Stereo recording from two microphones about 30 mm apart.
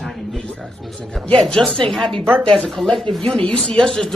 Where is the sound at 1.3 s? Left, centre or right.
Centre.